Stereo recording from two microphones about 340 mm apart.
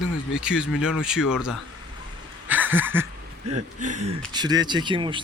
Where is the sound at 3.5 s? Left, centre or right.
Right.